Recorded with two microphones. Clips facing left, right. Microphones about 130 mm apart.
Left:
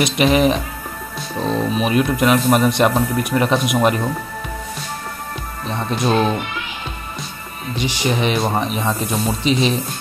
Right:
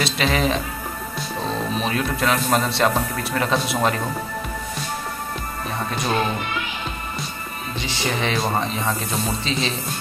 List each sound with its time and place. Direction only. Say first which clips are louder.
0.0 s speech: left 6 dB; 15° left (ahead or behind)
7.7 s speech: left 6 dB; 15° left (ahead or behind)